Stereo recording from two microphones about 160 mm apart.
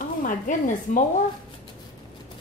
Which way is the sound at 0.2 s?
55° left (ahead or behind).